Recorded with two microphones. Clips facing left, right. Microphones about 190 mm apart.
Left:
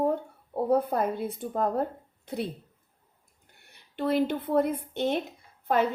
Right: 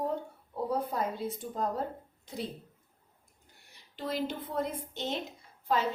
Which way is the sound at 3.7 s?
60° left (ahead or behind).